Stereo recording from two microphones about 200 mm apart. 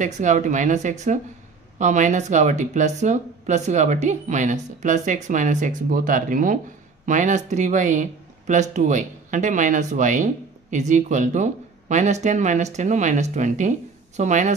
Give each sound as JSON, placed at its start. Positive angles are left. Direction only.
{"t": 0.0, "sound": "speech", "side_deg": -40}